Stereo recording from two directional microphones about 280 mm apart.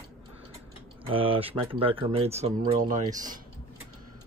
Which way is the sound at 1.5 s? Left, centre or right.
Centre.